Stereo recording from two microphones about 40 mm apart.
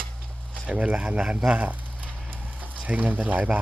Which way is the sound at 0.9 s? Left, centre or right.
Right.